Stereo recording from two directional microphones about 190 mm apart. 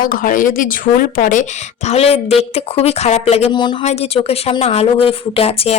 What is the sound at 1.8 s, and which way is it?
A woman's voice, 30° left (ahead or behind).